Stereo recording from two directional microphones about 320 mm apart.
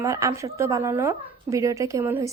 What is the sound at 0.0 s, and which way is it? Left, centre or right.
Speech, centre.